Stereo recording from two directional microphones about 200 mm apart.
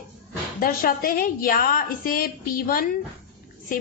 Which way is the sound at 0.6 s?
45° left (ahead or behind).